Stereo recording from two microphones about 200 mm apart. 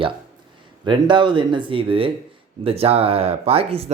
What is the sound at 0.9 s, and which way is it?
Speech, 25° right (ahead or behind).